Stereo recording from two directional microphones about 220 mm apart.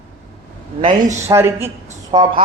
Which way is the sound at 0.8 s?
30° right (ahead or behind).